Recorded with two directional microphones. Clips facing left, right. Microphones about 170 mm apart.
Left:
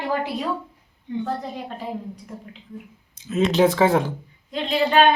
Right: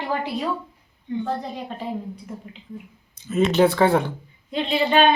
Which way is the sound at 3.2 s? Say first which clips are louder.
Even; centre (ahead or behind).